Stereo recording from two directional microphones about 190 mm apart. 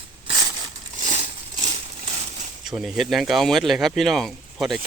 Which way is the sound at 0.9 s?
40° right (ahead or behind).